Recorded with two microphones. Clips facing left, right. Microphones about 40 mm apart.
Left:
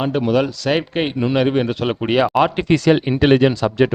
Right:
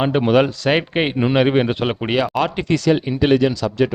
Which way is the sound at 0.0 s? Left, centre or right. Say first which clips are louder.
Right 2 dB; right.